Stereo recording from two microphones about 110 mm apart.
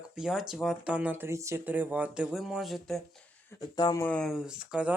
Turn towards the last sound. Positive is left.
turn(degrees=-10)  # may be behind; listen again after turning